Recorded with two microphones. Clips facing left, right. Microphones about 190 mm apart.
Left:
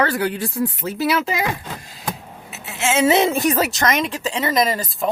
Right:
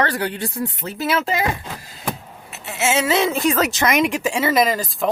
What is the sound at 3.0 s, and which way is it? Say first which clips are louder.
Speech: left 5 dB; 20° left (ahead or behind).